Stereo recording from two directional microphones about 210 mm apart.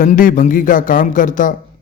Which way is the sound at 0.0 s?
40° left (ahead or behind).